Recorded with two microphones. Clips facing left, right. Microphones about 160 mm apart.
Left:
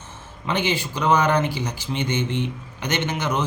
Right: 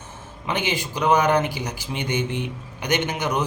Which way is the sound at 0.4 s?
15° right (ahead or behind).